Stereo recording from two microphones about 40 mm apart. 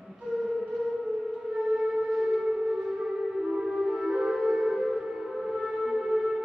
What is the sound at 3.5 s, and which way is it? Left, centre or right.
Music, centre.